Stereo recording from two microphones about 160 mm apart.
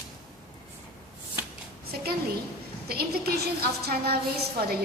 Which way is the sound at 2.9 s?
75° right (ahead or behind).